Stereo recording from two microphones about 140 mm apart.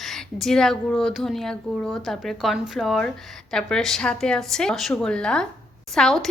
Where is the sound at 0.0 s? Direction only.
Centre (ahead or behind).